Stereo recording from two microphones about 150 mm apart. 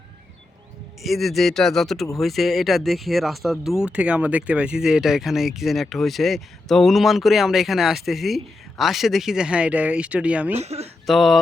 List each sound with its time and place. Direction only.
1.0 s speech: centre (ahead or behind)
10.5 s speech: 45° right (ahead or behind)
11.0 s a sound: centre (ahead or behind)